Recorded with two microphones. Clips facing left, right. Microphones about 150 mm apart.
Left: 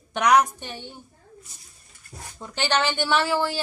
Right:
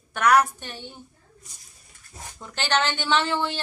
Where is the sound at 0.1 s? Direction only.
15° left (ahead or behind).